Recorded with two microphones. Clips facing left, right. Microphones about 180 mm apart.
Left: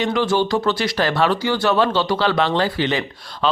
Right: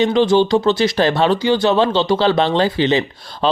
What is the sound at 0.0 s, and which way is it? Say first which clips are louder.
Speech: right 5 dB; 25° right (ahead or behind).